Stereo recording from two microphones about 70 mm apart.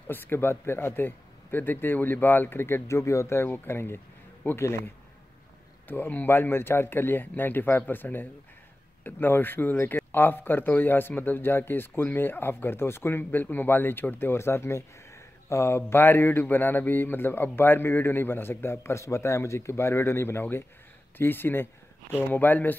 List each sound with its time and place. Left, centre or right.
0.1 s speech: left
5.9 s speech: left